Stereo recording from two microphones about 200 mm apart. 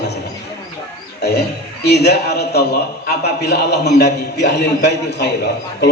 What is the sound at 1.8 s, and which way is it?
A man's voice, 55° left (ahead or behind).